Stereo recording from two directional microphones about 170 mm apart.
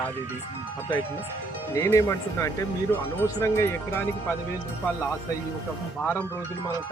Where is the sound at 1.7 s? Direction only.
15° left (ahead or behind).